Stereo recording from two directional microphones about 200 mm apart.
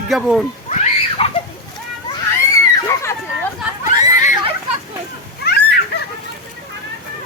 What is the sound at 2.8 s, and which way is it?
Children playing, 15° left (ahead or behind).